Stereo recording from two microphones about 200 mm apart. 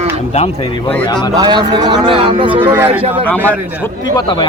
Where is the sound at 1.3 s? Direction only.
20° right (ahead or behind).